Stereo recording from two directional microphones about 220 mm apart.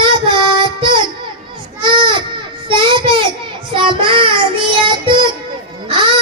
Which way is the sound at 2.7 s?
20° right (ahead or behind).